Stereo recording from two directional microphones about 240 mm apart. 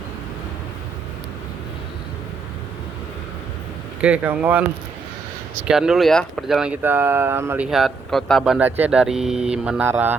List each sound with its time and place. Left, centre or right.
4.0 s speech: centre
5.6 s speech: centre